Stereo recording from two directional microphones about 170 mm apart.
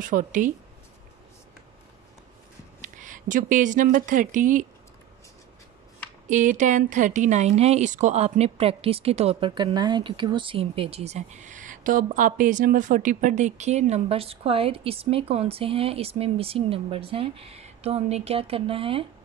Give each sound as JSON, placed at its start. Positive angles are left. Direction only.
{"t": 0.0, "sound": "speech", "side_deg": -50}
{"t": 2.8, "sound": "speech", "side_deg": -50}
{"t": 6.2, "sound": "a woman's voice", "side_deg": -45}